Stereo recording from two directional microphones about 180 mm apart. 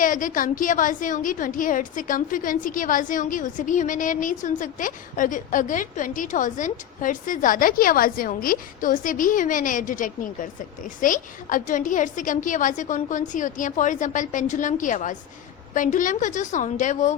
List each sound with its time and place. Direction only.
0.0 s a woman's voice: 45° left (ahead or behind)